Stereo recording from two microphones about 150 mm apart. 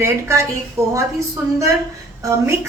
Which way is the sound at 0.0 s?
20° right (ahead or behind).